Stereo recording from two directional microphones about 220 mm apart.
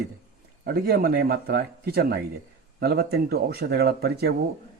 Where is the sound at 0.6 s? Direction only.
45° right (ahead or behind).